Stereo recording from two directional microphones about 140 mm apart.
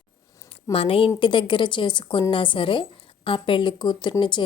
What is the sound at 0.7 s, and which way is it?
A woman's voice, 45° left (ahead or behind).